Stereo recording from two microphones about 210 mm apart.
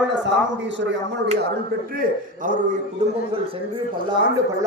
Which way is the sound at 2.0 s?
40° right (ahead or behind).